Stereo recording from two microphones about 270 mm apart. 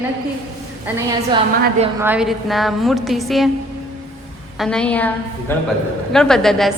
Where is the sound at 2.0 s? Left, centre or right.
Centre.